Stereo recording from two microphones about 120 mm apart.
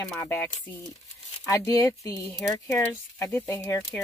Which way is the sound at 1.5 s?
30° left (ahead or behind).